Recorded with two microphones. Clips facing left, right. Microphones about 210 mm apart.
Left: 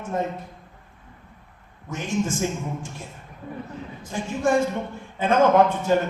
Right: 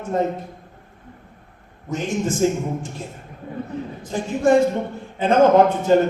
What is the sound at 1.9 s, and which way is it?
Speech, 35° right (ahead or behind).